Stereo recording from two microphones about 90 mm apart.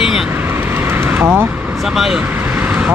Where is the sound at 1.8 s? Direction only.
5° right (ahead or behind).